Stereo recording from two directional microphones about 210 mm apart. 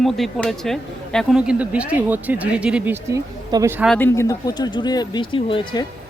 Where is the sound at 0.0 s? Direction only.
5° left (ahead or behind); by 3.8 s 15° right (ahead or behind).